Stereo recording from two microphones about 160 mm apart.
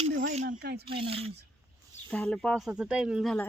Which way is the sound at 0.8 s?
35° right (ahead or behind).